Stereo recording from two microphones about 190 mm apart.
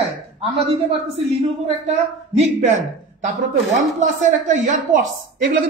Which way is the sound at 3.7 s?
40° right (ahead or behind).